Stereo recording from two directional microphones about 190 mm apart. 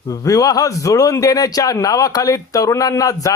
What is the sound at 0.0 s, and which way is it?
A man's voice, 15° left (ahead or behind).